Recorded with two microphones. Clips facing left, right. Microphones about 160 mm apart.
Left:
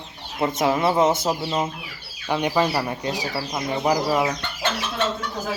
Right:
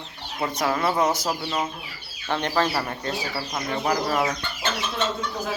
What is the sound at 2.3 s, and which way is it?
Speech, 10° left (ahead or behind).